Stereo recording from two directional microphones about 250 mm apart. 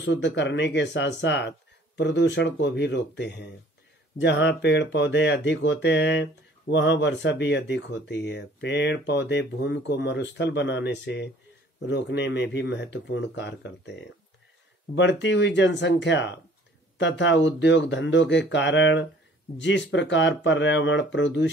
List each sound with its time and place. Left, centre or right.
0.0 s speech: left